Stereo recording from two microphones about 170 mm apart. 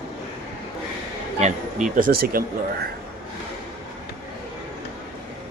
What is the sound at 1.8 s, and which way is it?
Speech, 50° right (ahead or behind).